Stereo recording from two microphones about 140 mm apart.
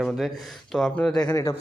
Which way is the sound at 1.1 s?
20° left (ahead or behind).